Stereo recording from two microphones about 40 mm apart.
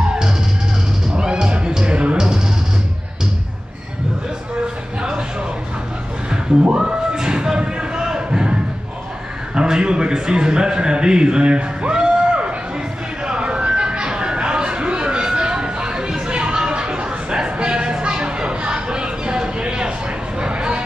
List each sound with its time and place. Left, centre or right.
1.1 s music: centre
2.1 s music: centre
6.3 s a sound: right
9.6 s a man's voice: right
11.9 s music: right
13.2 s a sound: right